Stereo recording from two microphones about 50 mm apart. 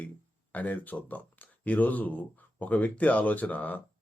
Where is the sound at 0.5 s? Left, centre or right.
Left.